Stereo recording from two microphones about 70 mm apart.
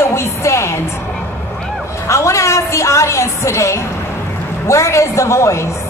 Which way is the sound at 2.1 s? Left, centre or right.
Left.